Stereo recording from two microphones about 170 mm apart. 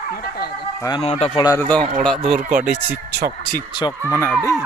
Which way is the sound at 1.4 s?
20° left (ahead or behind).